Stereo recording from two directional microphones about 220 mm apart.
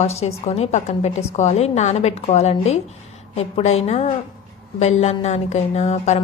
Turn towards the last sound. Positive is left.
turn(degrees=30)  # may be behind; listen again after turning